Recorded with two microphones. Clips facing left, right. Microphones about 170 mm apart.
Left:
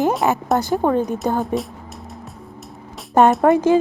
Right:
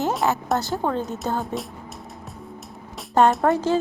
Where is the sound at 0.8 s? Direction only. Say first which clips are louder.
Left 7 dB; 15° left (ahead or behind).